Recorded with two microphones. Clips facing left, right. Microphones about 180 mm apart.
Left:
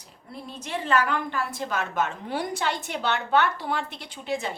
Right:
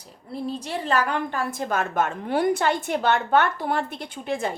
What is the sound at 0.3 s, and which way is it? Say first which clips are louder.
A woman's voice: right 6 dB; 35° right (ahead or behind).